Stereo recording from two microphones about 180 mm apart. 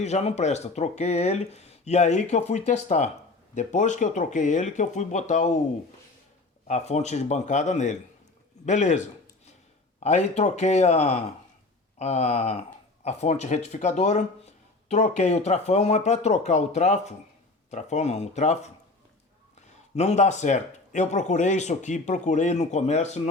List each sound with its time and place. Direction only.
0.0 s speech: 35° left (ahead or behind)
6.7 s speech: 40° left (ahead or behind)
20.0 s speech: 40° left (ahead or behind)